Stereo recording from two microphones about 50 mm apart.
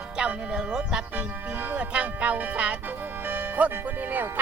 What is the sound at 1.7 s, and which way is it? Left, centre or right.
Music, right.